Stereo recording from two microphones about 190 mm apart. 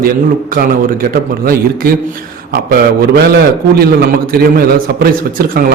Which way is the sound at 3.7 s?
50° right (ahead or behind).